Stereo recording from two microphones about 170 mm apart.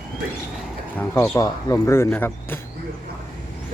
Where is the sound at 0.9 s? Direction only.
10° left (ahead or behind).